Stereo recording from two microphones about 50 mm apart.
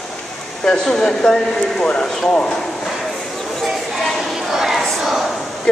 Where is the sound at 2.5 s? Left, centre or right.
Centre.